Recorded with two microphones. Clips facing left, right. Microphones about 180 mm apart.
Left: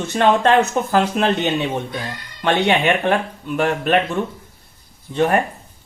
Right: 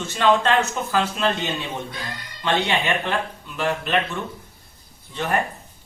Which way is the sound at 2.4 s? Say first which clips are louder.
Left 5 dB; 60° left (ahead or behind).